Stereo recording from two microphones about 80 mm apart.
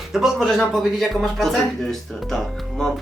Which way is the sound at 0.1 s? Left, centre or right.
Centre.